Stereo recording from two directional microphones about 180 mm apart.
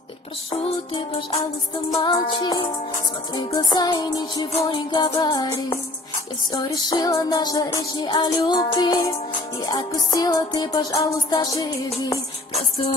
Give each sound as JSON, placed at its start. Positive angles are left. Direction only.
{"t": 0.5, "sound": "music", "side_deg": 30}